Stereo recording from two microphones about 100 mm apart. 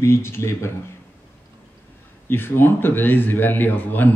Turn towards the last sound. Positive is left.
turn(degrees=20)  # may be behind; listen again after turning